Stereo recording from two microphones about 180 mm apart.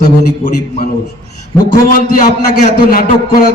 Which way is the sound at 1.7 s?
50° left (ahead or behind).